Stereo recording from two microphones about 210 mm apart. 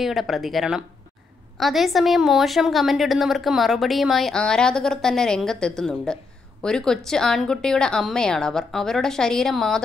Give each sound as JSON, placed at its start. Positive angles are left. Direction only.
{"t": 0.0, "sound": "a woman's voice", "side_deg": 0}